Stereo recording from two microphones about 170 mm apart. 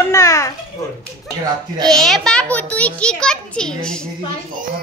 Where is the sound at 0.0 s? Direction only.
20° left (ahead or behind).